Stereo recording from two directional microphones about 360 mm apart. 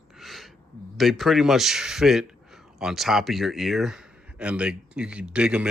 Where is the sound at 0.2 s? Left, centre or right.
Centre.